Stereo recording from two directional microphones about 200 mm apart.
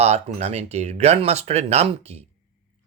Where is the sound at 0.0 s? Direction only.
35° right (ahead or behind).